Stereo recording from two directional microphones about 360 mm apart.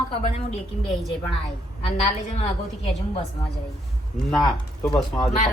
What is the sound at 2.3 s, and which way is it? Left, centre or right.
Speech, centre.